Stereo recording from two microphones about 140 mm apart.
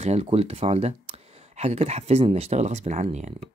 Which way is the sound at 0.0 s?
45° right (ahead or behind).